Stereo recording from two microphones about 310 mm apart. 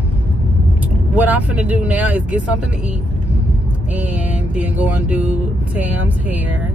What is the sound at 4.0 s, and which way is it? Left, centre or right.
Speech, centre.